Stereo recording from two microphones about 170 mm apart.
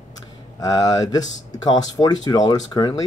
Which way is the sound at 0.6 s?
25° left (ahead or behind).